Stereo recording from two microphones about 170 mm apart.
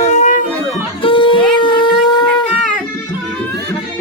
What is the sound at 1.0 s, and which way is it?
Shofar, 30° left (ahead or behind).